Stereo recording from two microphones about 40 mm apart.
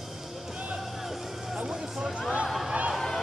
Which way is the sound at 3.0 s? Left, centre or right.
Centre.